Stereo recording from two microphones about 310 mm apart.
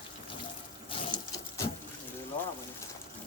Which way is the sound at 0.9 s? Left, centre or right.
Centre.